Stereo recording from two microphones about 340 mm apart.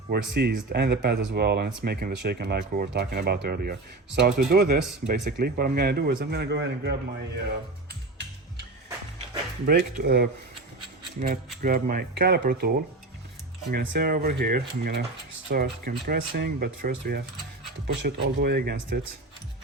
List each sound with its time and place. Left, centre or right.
0.1 s speech: right
7.9 s gears: right
9.3 s speech: right
13.9 s speech: right